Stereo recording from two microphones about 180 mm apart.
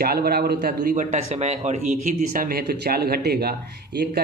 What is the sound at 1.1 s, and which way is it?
Speech, 35° right (ahead or behind).